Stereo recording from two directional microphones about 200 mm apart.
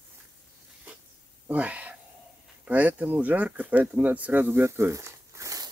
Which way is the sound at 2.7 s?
5° right (ahead or behind).